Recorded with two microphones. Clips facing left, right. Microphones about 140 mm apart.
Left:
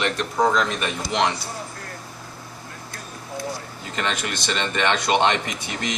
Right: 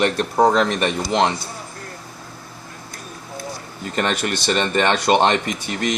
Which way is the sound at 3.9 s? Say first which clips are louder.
Right 5 dB; 50° right (ahead or behind).